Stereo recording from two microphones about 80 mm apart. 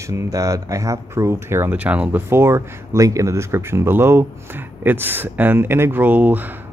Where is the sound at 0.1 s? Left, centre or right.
Right.